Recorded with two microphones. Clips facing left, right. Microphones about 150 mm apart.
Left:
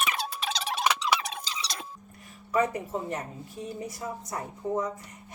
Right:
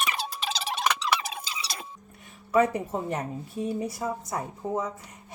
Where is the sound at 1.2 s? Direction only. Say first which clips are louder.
Even; 5° right (ahead or behind).